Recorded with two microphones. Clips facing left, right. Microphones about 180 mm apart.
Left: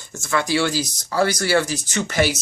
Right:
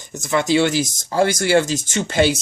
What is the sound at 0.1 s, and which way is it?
Speech, 20° right (ahead or behind).